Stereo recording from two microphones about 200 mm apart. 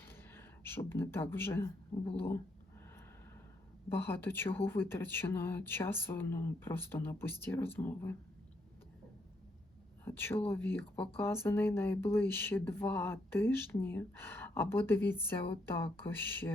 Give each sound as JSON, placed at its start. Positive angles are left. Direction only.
{"t": 0.0, "sound": "a sound", "side_deg": 10}
{"t": 1.9, "sound": "speech", "side_deg": 10}
{"t": 3.9, "sound": "speech", "side_deg": 10}
{"t": 10.0, "sound": "speech", "side_deg": 10}